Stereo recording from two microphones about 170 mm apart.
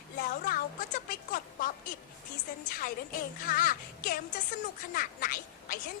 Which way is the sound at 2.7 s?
55° left (ahead or behind).